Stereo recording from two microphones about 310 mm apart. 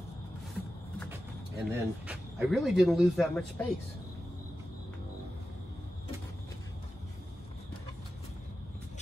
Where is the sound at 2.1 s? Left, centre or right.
Centre.